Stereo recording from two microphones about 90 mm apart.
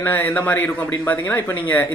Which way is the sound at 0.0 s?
20° left (ahead or behind).